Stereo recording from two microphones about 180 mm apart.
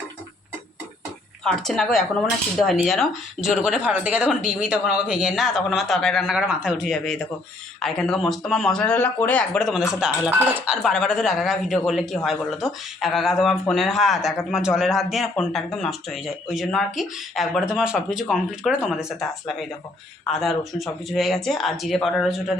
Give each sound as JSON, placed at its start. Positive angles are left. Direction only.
{"t": 1.5, "sound": "speech", "side_deg": 5}